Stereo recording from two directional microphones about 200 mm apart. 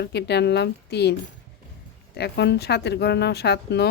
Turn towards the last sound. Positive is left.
turn(degrees=55)  # may be behind; listen again after turning